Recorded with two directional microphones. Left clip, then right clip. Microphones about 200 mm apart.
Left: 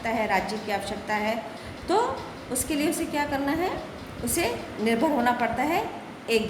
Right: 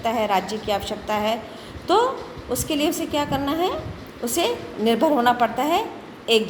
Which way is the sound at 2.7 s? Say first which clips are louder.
Right 4 dB; 30° right (ahead or behind).